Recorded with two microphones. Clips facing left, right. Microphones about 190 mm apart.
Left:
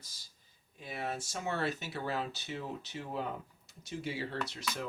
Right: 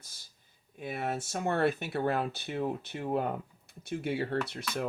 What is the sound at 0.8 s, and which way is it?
Speech, 55° right (ahead or behind).